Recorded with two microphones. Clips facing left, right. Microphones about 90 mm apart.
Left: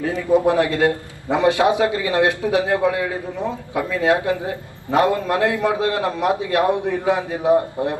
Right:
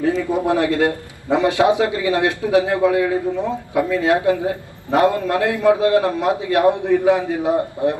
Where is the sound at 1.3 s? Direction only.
20° left (ahead or behind).